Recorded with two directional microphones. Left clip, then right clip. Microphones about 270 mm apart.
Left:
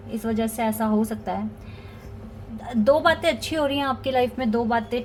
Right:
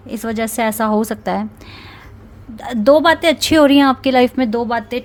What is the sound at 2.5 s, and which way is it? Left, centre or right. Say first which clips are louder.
Speech: right 8 dB; right.